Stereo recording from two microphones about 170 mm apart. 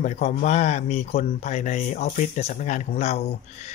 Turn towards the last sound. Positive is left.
turn(degrees=40)  # may be behind; listen again after turning